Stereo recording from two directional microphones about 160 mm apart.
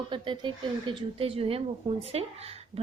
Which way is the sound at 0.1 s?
30° right (ahead or behind).